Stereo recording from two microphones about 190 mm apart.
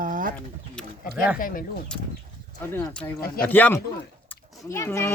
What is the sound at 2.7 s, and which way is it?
Speech, 5° left (ahead or behind).